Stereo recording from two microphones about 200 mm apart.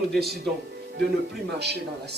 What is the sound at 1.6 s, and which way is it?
Speech, 55° right (ahead or behind).